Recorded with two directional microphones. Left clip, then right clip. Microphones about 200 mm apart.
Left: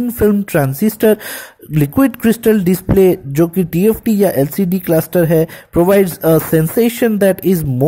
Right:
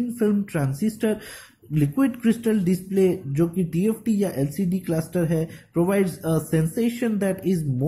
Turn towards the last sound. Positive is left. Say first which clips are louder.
# left 12 dB
turn(degrees=45)  # may be behind; listen again after turning